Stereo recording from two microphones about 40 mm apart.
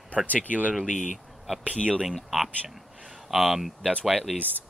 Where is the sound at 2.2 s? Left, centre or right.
Centre.